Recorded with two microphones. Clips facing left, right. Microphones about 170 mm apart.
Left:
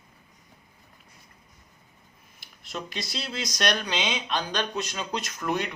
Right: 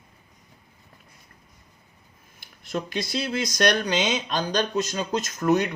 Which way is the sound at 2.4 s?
50° right (ahead or behind).